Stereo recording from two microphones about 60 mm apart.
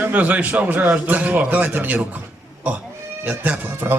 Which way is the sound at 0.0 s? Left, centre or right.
Right.